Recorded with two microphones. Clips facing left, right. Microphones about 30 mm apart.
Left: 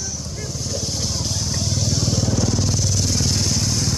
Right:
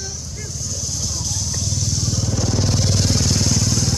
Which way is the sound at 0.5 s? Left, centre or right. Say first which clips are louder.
Left 2 dB; left.